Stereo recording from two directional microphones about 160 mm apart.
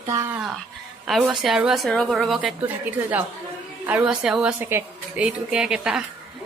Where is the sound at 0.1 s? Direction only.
20° right (ahead or behind).